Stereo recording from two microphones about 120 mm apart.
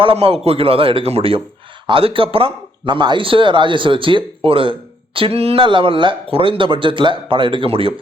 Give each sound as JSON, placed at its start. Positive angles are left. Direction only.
{"t": 0.0, "sound": "speech", "side_deg": -55}